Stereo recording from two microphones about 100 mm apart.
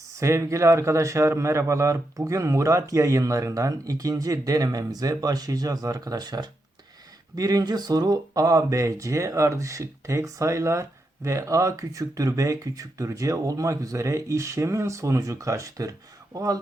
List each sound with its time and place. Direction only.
0.2 s speech: 30° right (ahead or behind)